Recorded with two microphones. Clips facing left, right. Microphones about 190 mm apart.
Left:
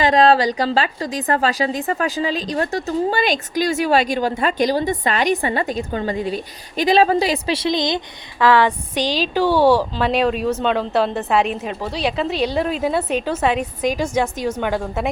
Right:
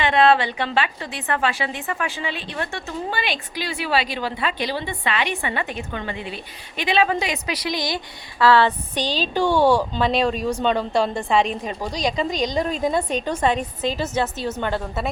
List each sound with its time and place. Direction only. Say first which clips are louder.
0.0 s a woman's voice: left 3 dB; 35° left (ahead or behind); by 15.1 s 10° left (ahead or behind)